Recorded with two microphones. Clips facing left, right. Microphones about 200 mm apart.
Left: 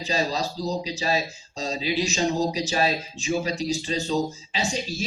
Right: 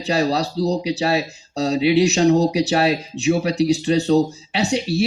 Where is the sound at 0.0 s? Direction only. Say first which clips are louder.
Right 6 dB; 65° right (ahead or behind).